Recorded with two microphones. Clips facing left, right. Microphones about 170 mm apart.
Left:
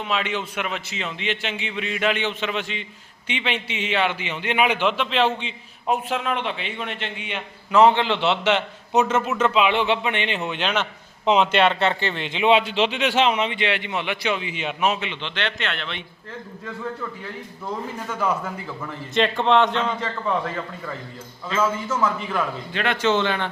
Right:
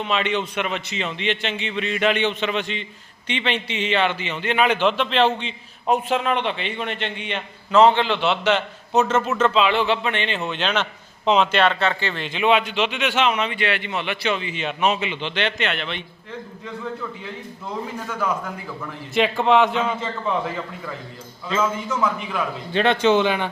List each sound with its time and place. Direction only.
0.0 s a man's voice: 5° left (ahead or behind)
7.9 s a man's voice: 20° left (ahead or behind); by 16.0 s 5° right (ahead or behind)
18.1 s a man's voice: 10° left (ahead or behind)
19.1 s a man's voice: 5° right (ahead or behind)
22.7 s speech: 25° right (ahead or behind)